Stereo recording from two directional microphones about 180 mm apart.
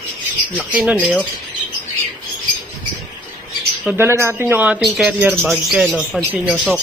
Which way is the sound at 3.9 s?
15° right (ahead or behind).